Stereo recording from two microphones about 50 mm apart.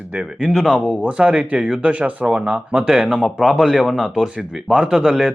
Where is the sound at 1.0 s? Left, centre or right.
Right.